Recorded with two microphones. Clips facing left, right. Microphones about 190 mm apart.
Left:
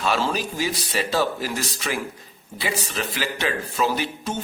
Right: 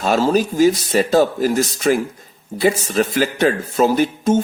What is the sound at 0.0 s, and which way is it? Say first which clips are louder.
Speech: right 8 dB; 40° right (ahead or behind).